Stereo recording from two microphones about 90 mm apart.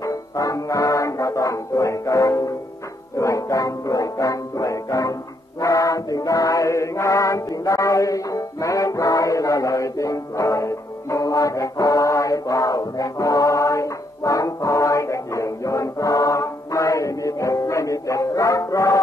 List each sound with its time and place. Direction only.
0.0 s music: 40° left (ahead or behind)
5.6 s chant: 40° left (ahead or behind)